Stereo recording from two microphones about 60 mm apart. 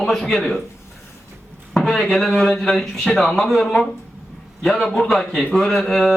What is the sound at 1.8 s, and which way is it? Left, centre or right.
Speech, centre.